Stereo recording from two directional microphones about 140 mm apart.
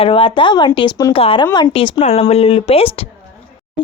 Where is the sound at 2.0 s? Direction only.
50° left (ahead or behind).